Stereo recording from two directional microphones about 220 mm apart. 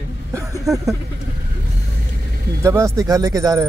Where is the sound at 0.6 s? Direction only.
Centre (ahead or behind).